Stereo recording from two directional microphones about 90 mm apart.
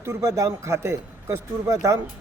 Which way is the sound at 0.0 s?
35° right (ahead or behind).